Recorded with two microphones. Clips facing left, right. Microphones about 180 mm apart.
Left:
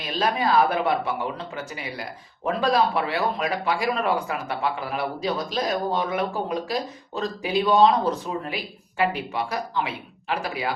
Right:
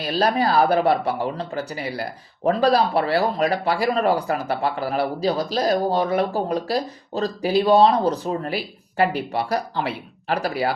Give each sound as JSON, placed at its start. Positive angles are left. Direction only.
{"t": 0.0, "sound": "speech", "side_deg": -35}